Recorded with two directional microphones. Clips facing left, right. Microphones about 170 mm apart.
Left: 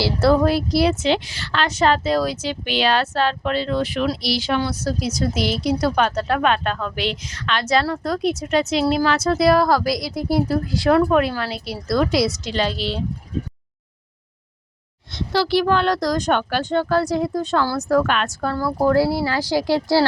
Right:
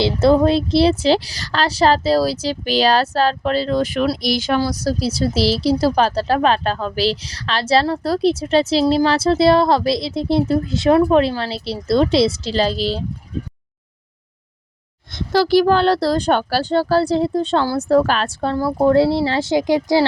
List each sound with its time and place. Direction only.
0.0 s a woman's voice: 20° right (ahead or behind); by 13.0 s 35° right (ahead or behind)
15.1 s a woman's voice: 45° right (ahead or behind); by 20.1 s 15° right (ahead or behind)